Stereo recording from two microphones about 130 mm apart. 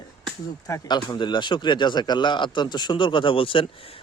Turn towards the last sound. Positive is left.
turn(degrees=45)  # may be behind; listen again after turning